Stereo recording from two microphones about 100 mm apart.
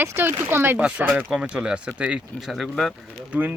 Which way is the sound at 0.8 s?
10° right (ahead or behind).